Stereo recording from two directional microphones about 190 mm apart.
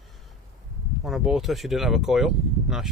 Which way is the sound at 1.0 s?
Centre (ahead or behind).